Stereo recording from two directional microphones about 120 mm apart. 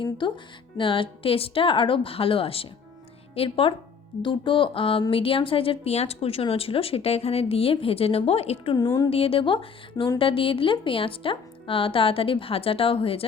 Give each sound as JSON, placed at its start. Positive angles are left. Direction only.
{"t": 0.2, "sound": "a woman's voice", "side_deg": 40}
{"t": 8.7, "sound": "a woman's voice", "side_deg": 35}
{"t": 9.0, "sound": "speech", "side_deg": 50}